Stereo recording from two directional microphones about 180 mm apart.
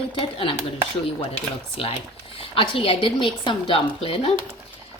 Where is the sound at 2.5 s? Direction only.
30° left (ahead or behind).